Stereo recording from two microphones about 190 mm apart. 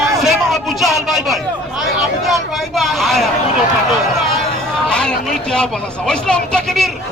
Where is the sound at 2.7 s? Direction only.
Centre (ahead or behind).